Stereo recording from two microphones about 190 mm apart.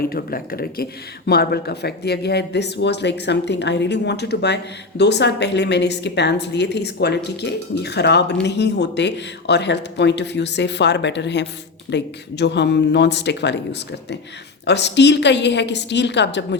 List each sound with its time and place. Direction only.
0.1 s a woman's voice: 50° left (ahead or behind); by 16.6 s 65° left (ahead or behind)